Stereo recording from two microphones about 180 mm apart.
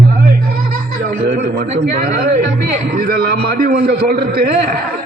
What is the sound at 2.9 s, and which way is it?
A man's voice, 55° right (ahead or behind).